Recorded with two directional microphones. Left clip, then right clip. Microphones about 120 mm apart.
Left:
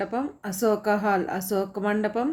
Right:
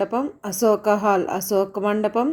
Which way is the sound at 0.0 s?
35° right (ahead or behind).